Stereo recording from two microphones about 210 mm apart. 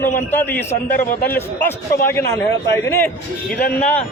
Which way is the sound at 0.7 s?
40° left (ahead or behind).